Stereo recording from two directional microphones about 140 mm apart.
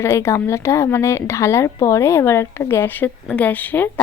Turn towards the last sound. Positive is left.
turn(degrees=15)  # may be behind; listen again after turning